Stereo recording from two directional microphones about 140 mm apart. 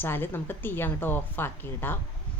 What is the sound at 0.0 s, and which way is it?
Speech, 15° left (ahead or behind).